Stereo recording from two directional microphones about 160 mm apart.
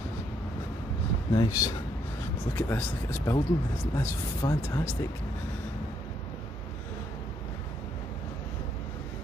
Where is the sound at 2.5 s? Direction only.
15° left (ahead or behind).